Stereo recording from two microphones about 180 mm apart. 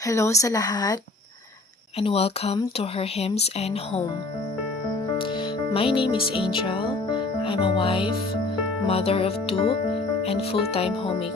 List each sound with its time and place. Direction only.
0.0 s speech: 15° left (ahead or behind)
2.0 s speech: 35° left (ahead or behind)
5.1 s music: 30° left (ahead or behind)
8.9 s speech: 35° left (ahead or behind)